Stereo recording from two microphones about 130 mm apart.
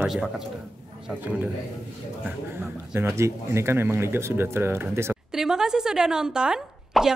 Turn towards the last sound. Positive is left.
turn(degrees=-5)  # may be behind; listen again after turning